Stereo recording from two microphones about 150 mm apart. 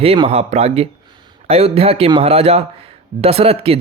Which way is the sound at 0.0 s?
40° right (ahead or behind).